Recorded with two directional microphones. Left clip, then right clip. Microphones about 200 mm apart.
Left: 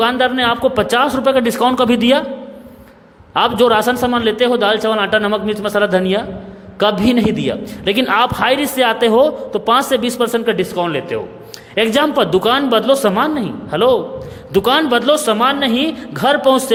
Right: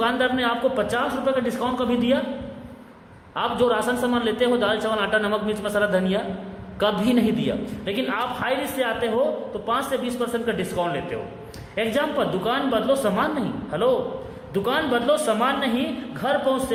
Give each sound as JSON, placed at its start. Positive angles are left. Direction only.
{"t": 0.0, "sound": "a man's voice", "side_deg": 35}
{"t": 3.3, "sound": "a man's voice", "side_deg": 45}